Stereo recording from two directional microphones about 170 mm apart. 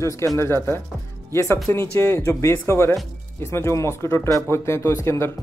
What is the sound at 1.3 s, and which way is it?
Speech, 15° left (ahead or behind).